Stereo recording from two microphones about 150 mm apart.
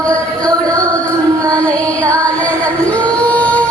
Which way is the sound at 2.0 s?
20° right (ahead or behind).